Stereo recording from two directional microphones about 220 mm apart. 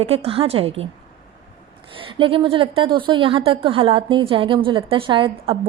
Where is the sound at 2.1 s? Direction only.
25° right (ahead or behind).